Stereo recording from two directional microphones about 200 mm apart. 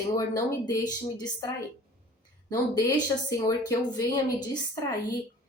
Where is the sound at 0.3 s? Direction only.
20° left (ahead or behind).